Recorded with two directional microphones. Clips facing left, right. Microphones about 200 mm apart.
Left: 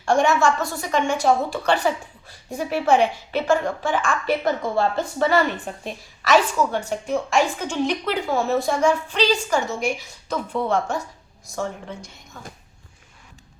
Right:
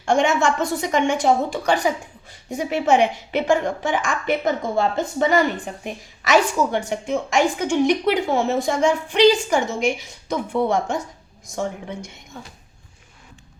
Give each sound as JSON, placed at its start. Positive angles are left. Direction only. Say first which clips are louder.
{"t": 0.1, "sound": "a woman's voice", "louder": "even", "side_deg": -20}